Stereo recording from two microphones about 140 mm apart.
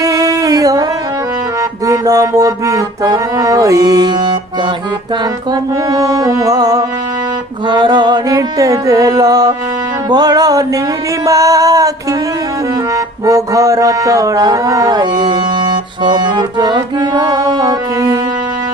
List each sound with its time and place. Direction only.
0.0 s a sound: 25° right (ahead or behind)
1.6 s music: 25° right (ahead or behind)
5.5 s music: 25° right (ahead or behind)